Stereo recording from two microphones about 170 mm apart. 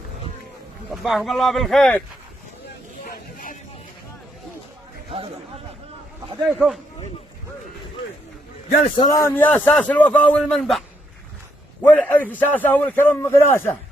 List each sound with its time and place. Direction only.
0.9 s speech: centre (ahead or behind)
3.0 s a sound: 55° left (ahead or behind)
6.5 s speech: 5° right (ahead or behind)
9.0 s a man's voice: 20° left (ahead or behind)